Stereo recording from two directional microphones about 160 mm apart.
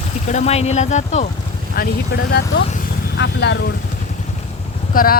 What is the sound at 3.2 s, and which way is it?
Speech, 90° left.